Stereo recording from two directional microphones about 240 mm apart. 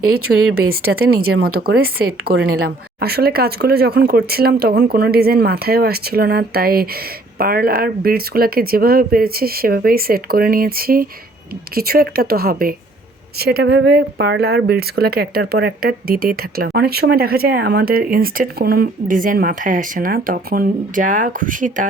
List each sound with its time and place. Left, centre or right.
0.7 s speech: right
1.1 s speech: right
1.5 s speech: right